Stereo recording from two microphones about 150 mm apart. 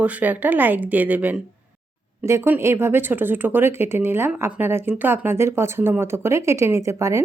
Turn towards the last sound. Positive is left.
turn(degrees=-20)  # may be behind; listen again after turning